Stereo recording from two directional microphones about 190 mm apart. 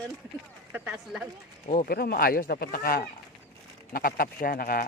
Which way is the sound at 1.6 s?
50° left (ahead or behind).